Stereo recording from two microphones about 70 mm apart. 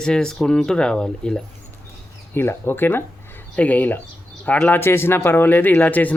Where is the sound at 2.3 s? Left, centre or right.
Left.